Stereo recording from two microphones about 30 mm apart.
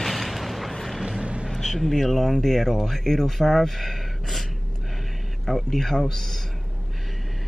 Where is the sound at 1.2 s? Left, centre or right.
Right.